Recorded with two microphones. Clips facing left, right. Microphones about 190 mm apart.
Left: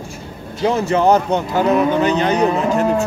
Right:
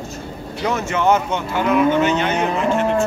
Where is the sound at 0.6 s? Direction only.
30° left (ahead or behind).